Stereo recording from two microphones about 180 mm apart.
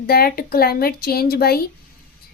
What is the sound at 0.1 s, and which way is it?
A woman's voice, 55° left (ahead or behind).